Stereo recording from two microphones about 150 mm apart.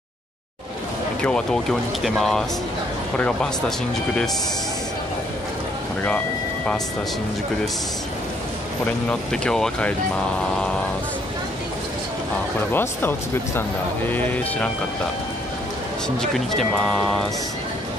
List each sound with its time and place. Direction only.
1.2 s speech: 5° left (ahead or behind)
9.3 s speech: 5° left (ahead or behind)
12.7 s speech: 15° left (ahead or behind)
16.2 s speech: centre (ahead or behind)